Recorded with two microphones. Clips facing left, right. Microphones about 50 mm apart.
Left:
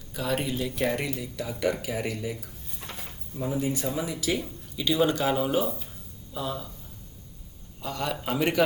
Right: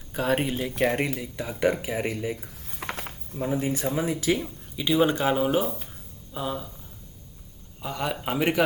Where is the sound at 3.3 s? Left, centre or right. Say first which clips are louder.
Right 2 dB; right.